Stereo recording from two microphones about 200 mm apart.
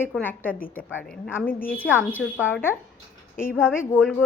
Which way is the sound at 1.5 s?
45° left (ahead or behind).